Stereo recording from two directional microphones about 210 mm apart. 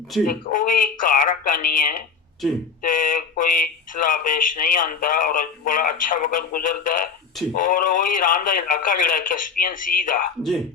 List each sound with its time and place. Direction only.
0.3 s speech: 40° left (ahead or behind)